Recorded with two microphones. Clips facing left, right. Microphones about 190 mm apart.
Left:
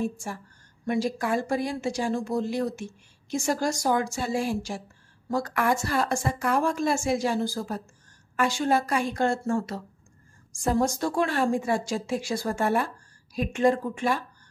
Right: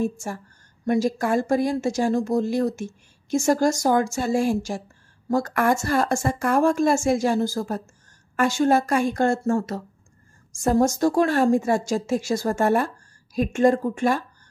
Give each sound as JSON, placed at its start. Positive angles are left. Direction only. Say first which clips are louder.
{"t": 0.0, "sound": "speech", "louder": "right 4 dB", "side_deg": -45}